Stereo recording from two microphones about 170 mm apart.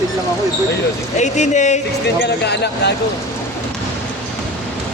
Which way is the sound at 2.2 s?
80° left.